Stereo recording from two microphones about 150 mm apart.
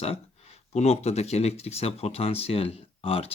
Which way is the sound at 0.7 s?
45° left (ahead or behind).